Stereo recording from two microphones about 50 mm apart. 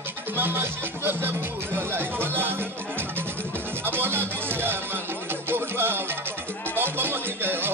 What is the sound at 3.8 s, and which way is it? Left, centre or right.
Speech, right.